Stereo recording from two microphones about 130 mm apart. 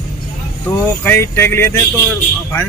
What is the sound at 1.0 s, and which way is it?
Speech, 20° left (ahead or behind).